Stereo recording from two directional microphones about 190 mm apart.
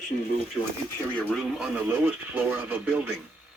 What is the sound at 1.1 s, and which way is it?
Speech, 5° left (ahead or behind).